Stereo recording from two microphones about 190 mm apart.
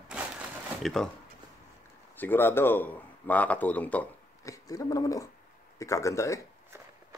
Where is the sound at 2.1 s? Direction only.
10° left (ahead or behind).